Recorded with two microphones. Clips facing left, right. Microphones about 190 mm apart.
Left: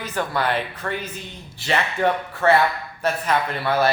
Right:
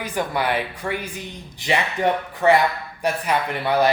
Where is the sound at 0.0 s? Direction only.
15° right (ahead or behind).